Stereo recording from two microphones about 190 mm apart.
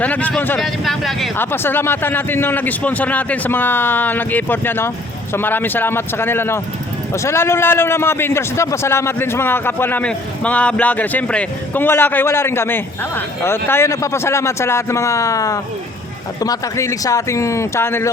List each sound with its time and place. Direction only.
0.0 s a man's voice: 10° left (ahead or behind)
1.4 s a man's voice: 10° left (ahead or behind)